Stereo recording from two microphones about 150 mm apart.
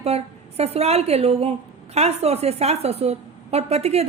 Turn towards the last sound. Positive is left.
turn(degrees=-45)  # may be behind; listen again after turning